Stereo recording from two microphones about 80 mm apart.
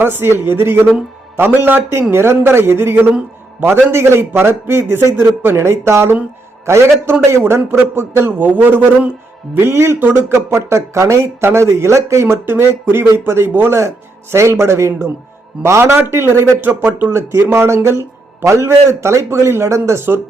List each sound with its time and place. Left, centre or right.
0.0 s a man's voice: right
9.6 s a man's voice: right